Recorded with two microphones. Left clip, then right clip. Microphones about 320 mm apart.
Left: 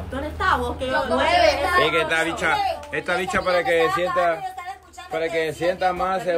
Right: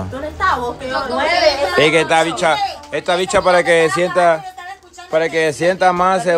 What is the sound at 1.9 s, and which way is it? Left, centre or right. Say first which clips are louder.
A man's voice: right 7 dB; centre.